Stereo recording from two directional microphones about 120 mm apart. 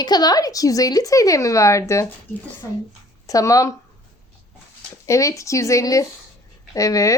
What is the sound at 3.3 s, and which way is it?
Speech, 30° left (ahead or behind).